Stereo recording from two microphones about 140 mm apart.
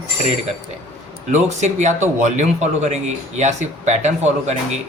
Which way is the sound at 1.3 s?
55° right (ahead or behind).